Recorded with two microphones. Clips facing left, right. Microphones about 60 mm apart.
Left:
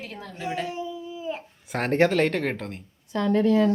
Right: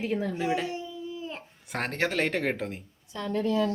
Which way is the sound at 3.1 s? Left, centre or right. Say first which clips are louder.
Left 7 dB; left.